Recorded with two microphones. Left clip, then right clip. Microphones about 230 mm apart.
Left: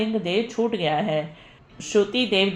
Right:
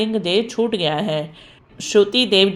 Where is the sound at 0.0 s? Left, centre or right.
Right.